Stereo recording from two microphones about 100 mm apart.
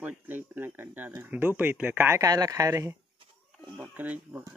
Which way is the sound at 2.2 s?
35° right (ahead or behind).